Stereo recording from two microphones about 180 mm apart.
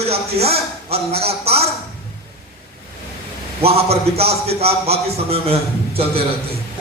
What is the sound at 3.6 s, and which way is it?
A man's voice, 35° right (ahead or behind).